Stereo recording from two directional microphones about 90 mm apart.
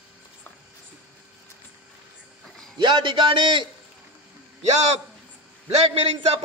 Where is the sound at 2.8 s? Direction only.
60° right (ahead or behind).